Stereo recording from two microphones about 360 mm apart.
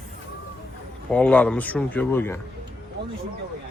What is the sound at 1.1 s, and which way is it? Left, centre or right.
Speech, centre.